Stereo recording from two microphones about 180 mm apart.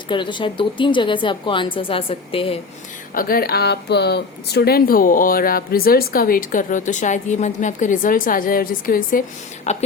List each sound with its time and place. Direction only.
0.1 s a woman's voice: 25° left (ahead or behind)
3.2 s speech: 55° left (ahead or behind)
9.7 s speech: 35° left (ahead or behind)